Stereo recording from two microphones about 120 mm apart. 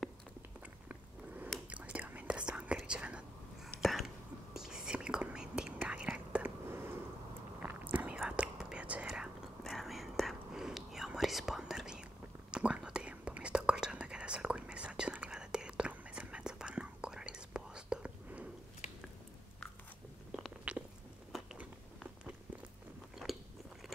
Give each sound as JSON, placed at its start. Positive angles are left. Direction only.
{"t": 0.8, "sound": "a sound", "side_deg": -15}
{"t": 1.7, "sound": "whispering", "side_deg": -10}
{"t": 20.2, "sound": "chewing", "side_deg": -5}